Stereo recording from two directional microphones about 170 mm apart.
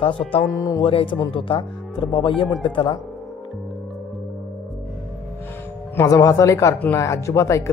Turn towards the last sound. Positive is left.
turn(degrees=20)  # may be behind; listen again after turning